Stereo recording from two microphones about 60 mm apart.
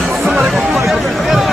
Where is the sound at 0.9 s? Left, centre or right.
Centre.